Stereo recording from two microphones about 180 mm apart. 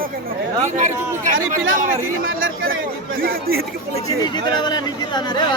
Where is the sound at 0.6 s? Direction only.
40° right (ahead or behind).